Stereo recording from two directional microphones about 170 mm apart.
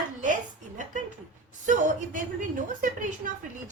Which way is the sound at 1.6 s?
45° right (ahead or behind).